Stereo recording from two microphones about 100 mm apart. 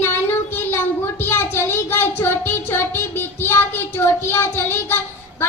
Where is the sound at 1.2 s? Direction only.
25° left (ahead or behind).